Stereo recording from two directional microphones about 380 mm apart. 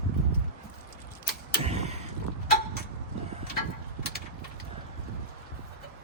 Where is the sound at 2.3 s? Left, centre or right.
Right.